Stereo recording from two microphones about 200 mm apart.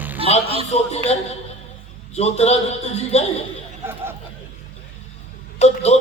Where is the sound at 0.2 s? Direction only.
30° right (ahead or behind).